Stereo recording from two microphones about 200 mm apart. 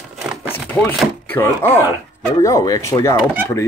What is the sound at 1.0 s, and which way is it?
Speech, 10° left (ahead or behind).